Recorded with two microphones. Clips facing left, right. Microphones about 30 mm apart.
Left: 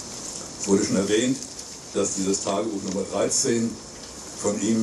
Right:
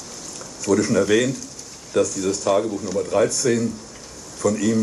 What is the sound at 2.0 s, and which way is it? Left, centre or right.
Speech, right.